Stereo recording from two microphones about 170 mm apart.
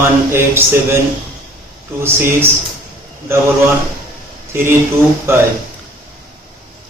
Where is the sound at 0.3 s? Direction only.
15° right (ahead or behind).